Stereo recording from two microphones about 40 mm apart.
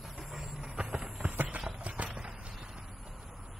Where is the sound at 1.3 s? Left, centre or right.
Right.